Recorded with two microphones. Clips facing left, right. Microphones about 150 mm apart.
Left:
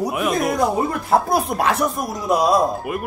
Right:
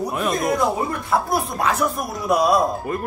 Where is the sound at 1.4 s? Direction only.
80° left.